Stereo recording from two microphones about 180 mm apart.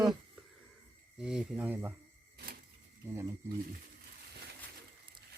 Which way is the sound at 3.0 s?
15° right (ahead or behind).